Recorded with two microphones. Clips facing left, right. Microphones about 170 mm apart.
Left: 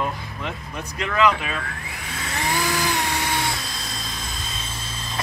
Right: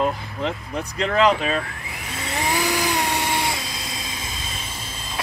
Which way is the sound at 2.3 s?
10° right (ahead or behind).